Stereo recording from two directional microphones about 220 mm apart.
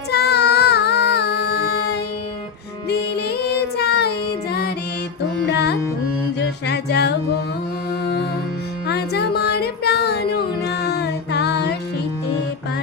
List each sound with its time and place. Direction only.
0.1 s child singing: 50° left (ahead or behind)
5.5 s music: 50° left (ahead or behind)
8.9 s music: 45° left (ahead or behind)